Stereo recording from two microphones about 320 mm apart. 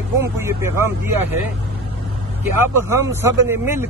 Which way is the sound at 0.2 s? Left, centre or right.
Centre.